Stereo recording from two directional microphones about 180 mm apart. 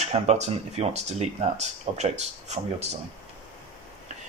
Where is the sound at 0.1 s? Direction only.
35° right (ahead or behind).